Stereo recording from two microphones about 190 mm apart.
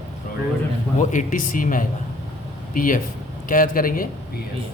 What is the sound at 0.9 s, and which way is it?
A man's voice, 40° left (ahead or behind).